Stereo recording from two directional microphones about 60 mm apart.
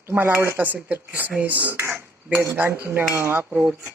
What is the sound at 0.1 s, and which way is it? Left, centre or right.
Speech, right.